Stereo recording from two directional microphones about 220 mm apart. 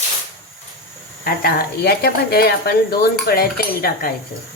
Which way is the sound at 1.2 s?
45° left (ahead or behind).